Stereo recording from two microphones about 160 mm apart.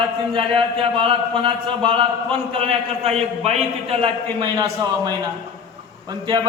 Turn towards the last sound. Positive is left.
turn(degrees=-25)  # may be behind; listen again after turning